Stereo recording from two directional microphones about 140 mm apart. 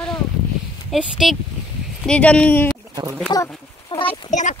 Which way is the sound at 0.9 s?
Centre (ahead or behind).